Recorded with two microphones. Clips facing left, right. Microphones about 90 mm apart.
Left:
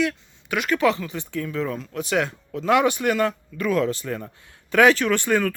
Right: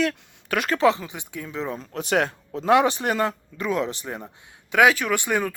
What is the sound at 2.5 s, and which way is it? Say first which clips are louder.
Speech: right 1 dB; 25° right (ahead or behind).